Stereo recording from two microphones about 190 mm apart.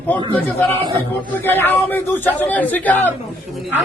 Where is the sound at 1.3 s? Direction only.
10° left (ahead or behind).